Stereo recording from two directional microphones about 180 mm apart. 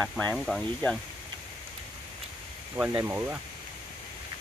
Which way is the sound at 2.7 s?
10° right (ahead or behind).